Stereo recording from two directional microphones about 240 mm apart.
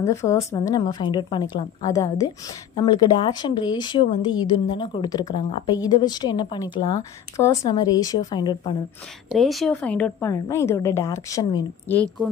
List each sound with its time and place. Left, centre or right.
0.0 s a woman's voice: centre
9.3 s a woman's voice: centre